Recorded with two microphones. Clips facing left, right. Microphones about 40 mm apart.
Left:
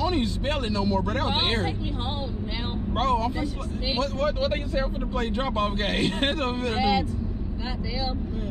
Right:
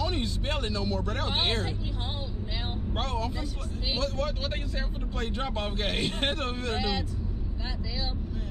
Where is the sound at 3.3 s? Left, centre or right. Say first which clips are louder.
Left 7 dB; centre.